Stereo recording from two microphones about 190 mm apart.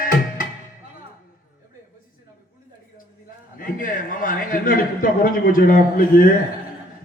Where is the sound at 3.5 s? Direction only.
50° left (ahead or behind).